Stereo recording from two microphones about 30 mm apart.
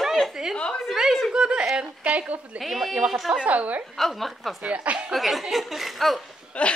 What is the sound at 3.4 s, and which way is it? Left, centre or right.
Speech, right.